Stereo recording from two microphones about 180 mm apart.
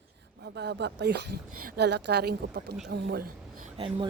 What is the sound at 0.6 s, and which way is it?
Speech, 70° right (ahead or behind).